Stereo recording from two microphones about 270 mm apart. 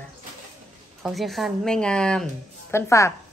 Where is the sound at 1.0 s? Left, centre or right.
Centre.